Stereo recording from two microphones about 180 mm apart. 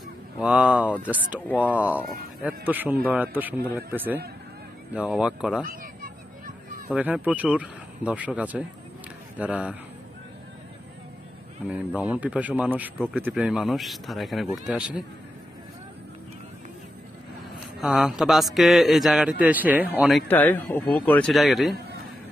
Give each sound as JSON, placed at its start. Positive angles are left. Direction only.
{"t": 0.4, "sound": "a man's voice", "side_deg": -5}
{"t": 5.7, "sound": "a sound", "side_deg": -50}
{"t": 6.9, "sound": "speech", "side_deg": -10}
{"t": 11.7, "sound": "a man's voice", "side_deg": -5}
{"t": 17.7, "sound": "a man's voice", "side_deg": -5}
{"t": 20.2, "sound": "a man's voice", "side_deg": 10}